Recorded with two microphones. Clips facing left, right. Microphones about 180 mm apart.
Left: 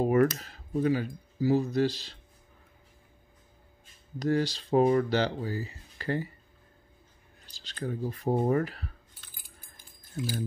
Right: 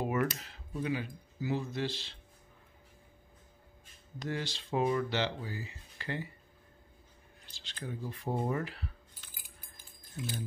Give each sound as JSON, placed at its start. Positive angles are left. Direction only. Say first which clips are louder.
{"t": 0.0, "sound": "speech", "louder": "left 9 dB", "side_deg": 40}
{"t": 4.2, "sound": "speech", "louder": "left 10 dB", "side_deg": 40}
{"t": 7.5, "sound": "speech", "louder": "left 7 dB", "side_deg": 40}